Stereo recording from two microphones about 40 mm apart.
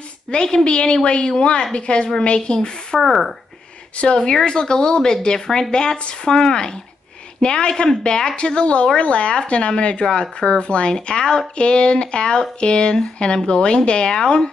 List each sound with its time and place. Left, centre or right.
0.3 s speech: centre
3.0 s speech: centre
3.9 s speech: left
4.2 s speech: centre